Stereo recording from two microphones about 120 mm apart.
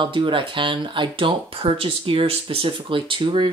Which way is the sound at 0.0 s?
45° right (ahead or behind).